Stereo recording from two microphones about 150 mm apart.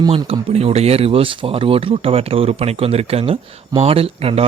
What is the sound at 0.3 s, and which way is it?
Speech, 40° right (ahead or behind).